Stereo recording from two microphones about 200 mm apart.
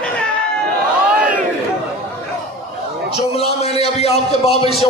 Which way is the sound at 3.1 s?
30° left (ahead or behind).